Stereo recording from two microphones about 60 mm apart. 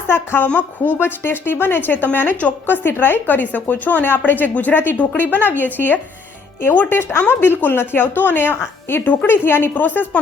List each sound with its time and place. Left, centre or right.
0.1 s speech: left